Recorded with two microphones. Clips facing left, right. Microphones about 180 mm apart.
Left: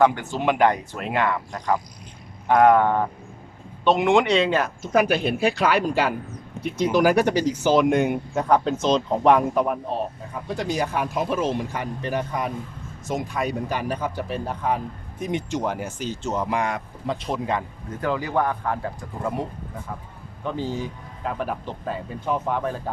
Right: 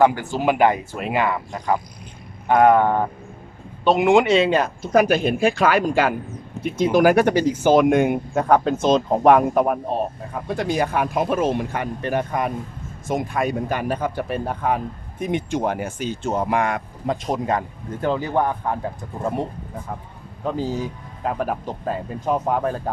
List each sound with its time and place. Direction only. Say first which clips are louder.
0.0 s speech: right 2 dB; 5° right (ahead or behind)
4.8 s speech: right 3 dB; 40° right (ahead or behind)
18.0 s speech: right 2 dB; 20° right (ahead or behind)
20.4 s speech: right 3 dB; 40° right (ahead or behind)